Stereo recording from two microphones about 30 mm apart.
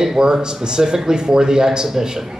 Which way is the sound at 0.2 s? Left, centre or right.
Right.